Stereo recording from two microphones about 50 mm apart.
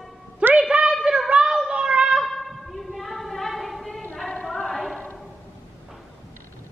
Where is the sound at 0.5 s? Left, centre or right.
Centre.